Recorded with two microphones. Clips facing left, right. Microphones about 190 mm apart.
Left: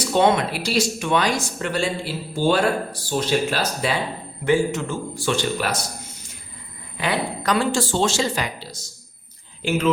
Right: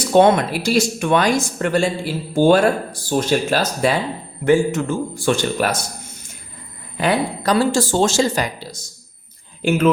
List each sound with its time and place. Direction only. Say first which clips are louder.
0.1 s speech: right 5 dB; 50° right (ahead or behind)
6.9 s speech: right 5 dB; 45° right (ahead or behind)
9.6 s speech: right 5 dB; 55° right (ahead or behind)